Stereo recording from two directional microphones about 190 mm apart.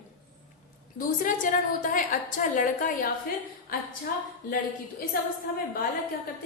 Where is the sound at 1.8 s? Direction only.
45° left (ahead or behind).